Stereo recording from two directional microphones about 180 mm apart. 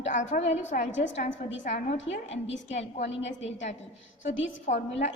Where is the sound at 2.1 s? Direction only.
90° left.